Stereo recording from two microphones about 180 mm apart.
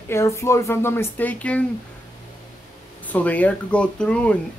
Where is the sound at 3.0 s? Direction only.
10° left (ahead or behind).